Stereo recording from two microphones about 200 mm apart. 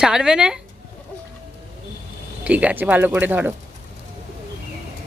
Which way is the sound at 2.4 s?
5° right (ahead or behind).